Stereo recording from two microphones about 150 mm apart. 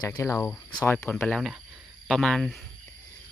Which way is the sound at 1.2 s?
5° left (ahead or behind).